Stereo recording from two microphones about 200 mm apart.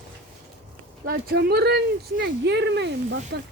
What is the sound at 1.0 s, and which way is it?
Speech, 50° right (ahead or behind).